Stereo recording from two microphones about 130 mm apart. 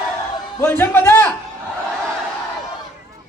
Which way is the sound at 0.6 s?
15° left (ahead or behind).